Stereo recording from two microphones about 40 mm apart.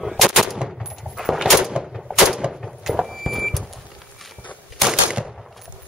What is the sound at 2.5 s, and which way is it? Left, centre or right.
Door, centre.